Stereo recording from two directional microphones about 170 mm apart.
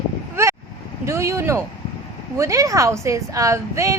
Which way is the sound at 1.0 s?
15° right (ahead or behind).